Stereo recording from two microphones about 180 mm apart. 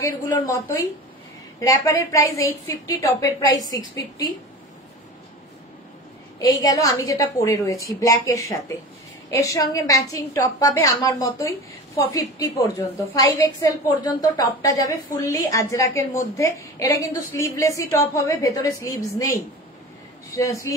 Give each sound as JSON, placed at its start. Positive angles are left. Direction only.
{"t": 0.0, "sound": "a woman's voice", "side_deg": 15}
{"t": 1.6, "sound": "a woman's voice", "side_deg": 15}
{"t": 6.4, "sound": "a woman's voice", "side_deg": 20}